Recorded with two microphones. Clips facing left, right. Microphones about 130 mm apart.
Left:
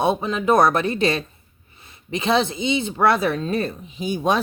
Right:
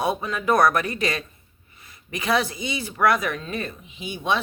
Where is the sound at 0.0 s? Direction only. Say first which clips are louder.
Left 4 dB; 25° left (ahead or behind).